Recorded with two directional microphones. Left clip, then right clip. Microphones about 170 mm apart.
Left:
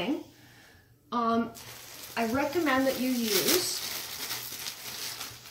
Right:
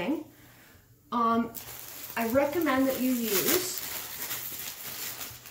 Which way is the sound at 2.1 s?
Centre (ahead or behind).